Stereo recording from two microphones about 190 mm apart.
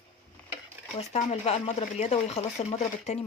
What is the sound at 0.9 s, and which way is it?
Speech, 35° left (ahead or behind).